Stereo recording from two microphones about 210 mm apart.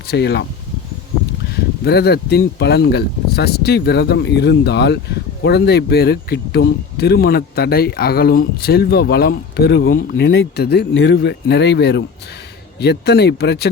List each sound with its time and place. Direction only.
0.1 s speech: 55° left (ahead or behind)
1.8 s speech: 50° left (ahead or behind)